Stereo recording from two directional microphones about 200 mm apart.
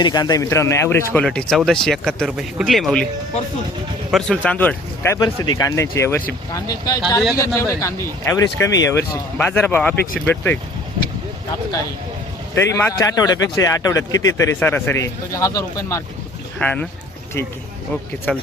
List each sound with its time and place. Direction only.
0.0 s speech: 20° left (ahead or behind); by 3.1 s 5° left (ahead or behind)
4.1 s a man's voice: 5° left (ahead or behind)
12.5 s a man's voice: 15° left (ahead or behind)
18.3 s a man's voice: 5° left (ahead or behind)